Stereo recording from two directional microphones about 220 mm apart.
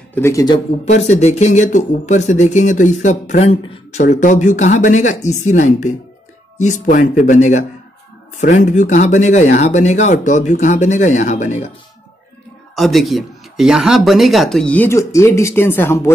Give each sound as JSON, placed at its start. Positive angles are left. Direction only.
{"t": 0.1, "sound": "speech", "side_deg": 10}
{"t": 0.8, "sound": "speech", "side_deg": 30}
{"t": 12.7, "sound": "speech", "side_deg": 0}